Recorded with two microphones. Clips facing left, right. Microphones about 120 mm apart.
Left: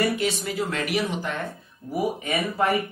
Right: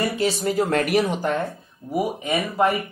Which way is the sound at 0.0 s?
35° right (ahead or behind).